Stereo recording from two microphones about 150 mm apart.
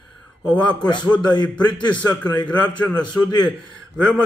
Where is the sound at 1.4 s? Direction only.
30° left (ahead or behind).